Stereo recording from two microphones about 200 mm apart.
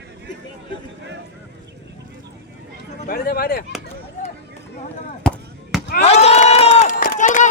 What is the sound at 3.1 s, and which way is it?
Speech, 50° left (ahead or behind).